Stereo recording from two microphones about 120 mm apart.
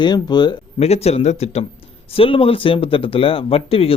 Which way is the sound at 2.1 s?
50° left (ahead or behind).